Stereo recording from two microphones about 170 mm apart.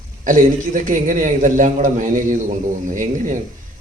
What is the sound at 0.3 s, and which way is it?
A man's voice, 50° right (ahead or behind).